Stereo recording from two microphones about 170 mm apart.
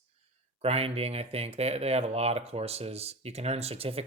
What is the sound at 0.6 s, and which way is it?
Speech, 35° right (ahead or behind).